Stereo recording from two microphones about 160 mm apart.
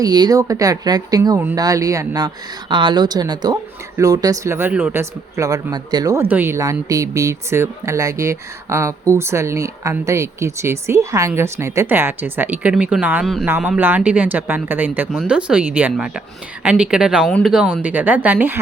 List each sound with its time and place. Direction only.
0.0 s a woman's voice: 25° right (ahead or behind)